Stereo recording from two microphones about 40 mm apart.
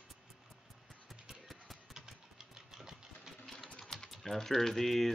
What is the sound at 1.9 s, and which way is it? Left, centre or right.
Engine, centre.